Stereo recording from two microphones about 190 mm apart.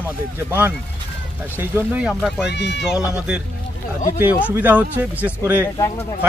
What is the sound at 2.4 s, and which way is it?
Speech, 65° left (ahead or behind).